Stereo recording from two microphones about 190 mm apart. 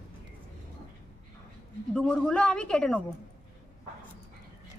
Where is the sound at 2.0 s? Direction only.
5° left (ahead or behind).